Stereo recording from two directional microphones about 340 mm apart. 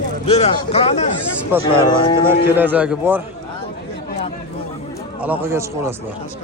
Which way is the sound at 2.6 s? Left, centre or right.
Centre.